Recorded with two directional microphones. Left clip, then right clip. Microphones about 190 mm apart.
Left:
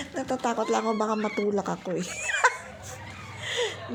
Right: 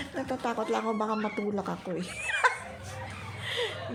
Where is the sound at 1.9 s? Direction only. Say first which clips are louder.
Left 3 dB; 25° left (ahead or behind).